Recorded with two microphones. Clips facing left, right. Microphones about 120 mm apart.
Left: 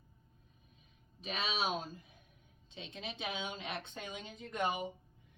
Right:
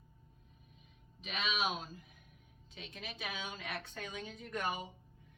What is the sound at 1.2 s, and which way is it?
A woman's voice, 35° left (ahead or behind).